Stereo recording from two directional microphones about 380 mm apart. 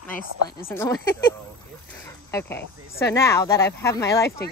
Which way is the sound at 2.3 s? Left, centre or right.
Centre.